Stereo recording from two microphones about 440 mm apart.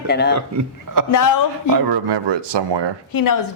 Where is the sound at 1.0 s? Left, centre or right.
Right.